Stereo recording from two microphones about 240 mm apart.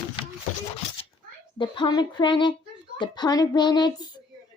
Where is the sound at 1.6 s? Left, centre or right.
Centre.